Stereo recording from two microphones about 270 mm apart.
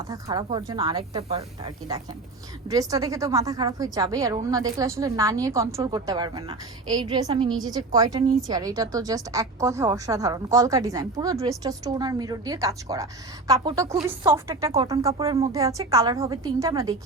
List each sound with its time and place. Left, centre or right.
0.1 s a woman's voice: centre